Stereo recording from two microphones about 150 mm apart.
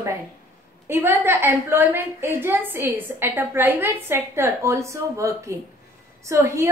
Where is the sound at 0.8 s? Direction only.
15° right (ahead or behind).